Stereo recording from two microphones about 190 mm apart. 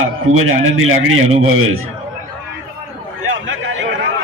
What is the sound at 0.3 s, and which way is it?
A man's voice, 90° right.